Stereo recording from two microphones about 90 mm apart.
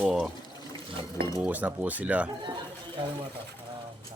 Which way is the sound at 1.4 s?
15° right (ahead or behind).